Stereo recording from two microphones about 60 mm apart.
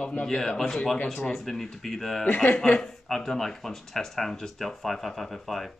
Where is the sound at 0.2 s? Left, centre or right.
Centre.